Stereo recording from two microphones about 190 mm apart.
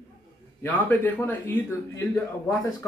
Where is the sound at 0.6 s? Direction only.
10° left (ahead or behind).